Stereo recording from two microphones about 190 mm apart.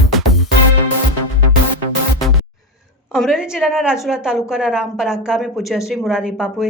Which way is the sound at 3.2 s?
Centre (ahead or behind).